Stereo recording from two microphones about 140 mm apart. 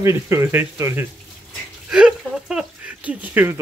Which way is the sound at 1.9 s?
5° right (ahead or behind).